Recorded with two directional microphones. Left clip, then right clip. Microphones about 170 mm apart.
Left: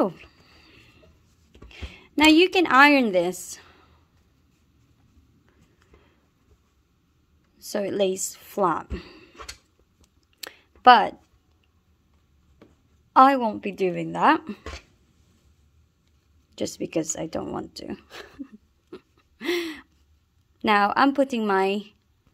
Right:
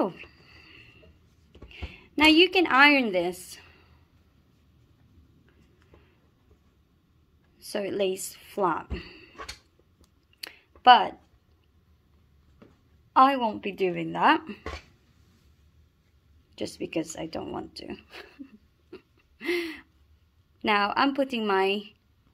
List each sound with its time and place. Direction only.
0.0 s a sound: 40° left (ahead or behind)
1.7 s a woman's voice: 55° left (ahead or behind)
7.7 s speech: 50° left (ahead or behind)
10.4 s a sound: 50° left (ahead or behind)
13.1 s a woman's voice: 55° left (ahead or behind)
16.5 s a woman's voice: 55° left (ahead or behind)